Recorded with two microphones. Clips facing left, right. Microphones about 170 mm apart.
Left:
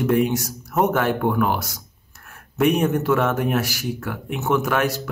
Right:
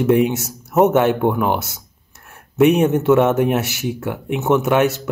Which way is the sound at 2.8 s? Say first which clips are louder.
Right 6 dB; 25° right (ahead or behind).